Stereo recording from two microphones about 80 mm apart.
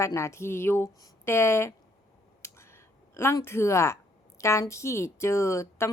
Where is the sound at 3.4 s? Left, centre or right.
Left.